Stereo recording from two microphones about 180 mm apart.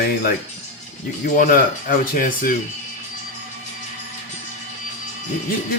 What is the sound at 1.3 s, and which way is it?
Speech, 50° left (ahead or behind).